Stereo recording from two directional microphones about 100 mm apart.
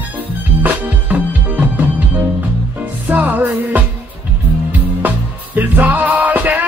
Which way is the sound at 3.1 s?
15° right (ahead or behind).